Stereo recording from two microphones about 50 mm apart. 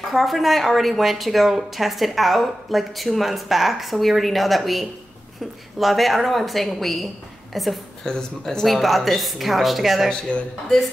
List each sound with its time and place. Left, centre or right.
0.1 s a woman's voice: centre
8.0 s speech: centre
8.6 s a woman's voice: centre